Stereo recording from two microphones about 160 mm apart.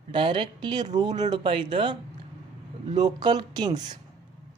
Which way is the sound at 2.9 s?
25° right (ahead or behind).